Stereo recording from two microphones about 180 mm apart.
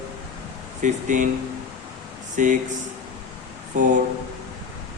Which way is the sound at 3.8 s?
45° right (ahead or behind).